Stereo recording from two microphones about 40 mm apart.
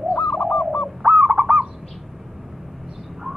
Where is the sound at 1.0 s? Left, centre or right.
Centre.